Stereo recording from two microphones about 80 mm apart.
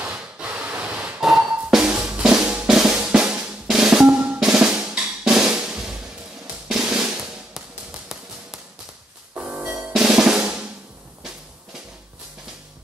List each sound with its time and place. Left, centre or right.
0.4 s a sound: centre
1.2 s music: centre
2.0 s drum: centre
6.4 s music: centre
9.9 s drum: centre